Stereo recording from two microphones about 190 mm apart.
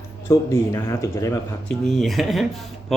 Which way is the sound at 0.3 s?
15° left (ahead or behind).